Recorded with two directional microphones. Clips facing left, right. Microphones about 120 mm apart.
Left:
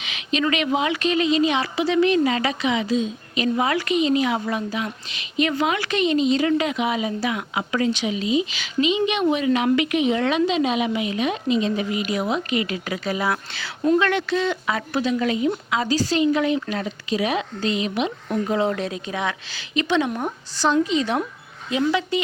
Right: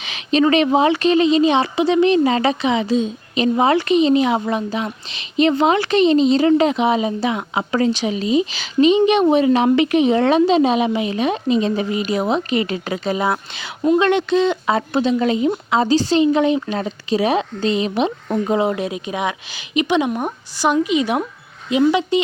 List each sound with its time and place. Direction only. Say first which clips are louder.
0.0 s speech: right 7 dB; 35° right (ahead or behind)
18.4 s a woman's voice: right 4 dB; 15° right (ahead or behind)